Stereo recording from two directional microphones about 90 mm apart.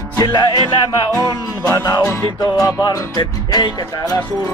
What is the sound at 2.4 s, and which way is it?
Music, 40° left (ahead or behind).